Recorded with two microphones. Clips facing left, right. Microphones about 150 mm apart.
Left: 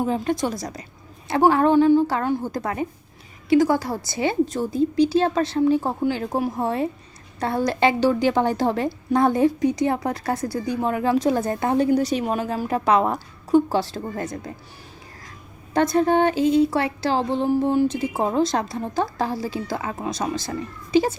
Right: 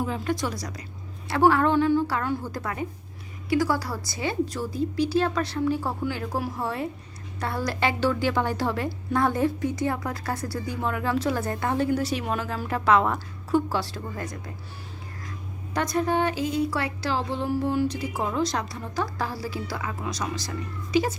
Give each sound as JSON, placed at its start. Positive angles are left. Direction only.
{"t": 0.0, "sound": "a woman's voice", "side_deg": 25}
{"t": 15.7, "sound": "a woman's voice", "side_deg": 25}
{"t": 18.2, "sound": "a woman's voice", "side_deg": 35}